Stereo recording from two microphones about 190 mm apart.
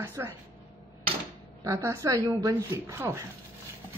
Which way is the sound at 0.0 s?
10° right (ahead or behind).